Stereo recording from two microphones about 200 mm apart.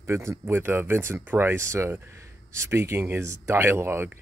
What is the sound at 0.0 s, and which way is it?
Speech, 15° right (ahead or behind).